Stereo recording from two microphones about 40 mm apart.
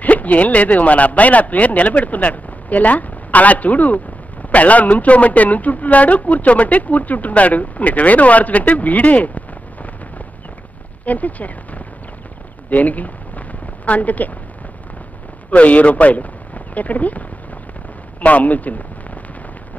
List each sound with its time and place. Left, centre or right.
0.0 s speech: left
12.6 s a sound: left
15.5 s speech: left
18.2 s speech: left